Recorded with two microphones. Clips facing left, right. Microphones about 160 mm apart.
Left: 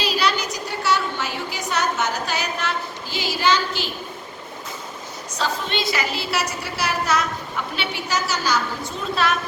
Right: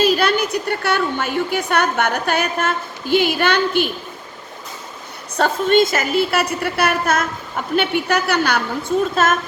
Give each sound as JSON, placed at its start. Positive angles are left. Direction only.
{"t": 0.0, "sound": "a woman's voice", "side_deg": -50}
{"t": 5.4, "sound": "a woman's voice", "side_deg": -45}
{"t": 9.1, "sound": "a woman's voice", "side_deg": -45}